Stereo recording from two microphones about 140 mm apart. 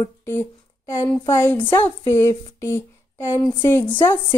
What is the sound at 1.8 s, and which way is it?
Speech, 20° left (ahead or behind).